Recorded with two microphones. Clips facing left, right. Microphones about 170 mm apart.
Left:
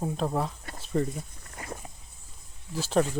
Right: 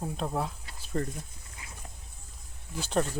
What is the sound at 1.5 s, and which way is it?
Dog, 55° left (ahead or behind).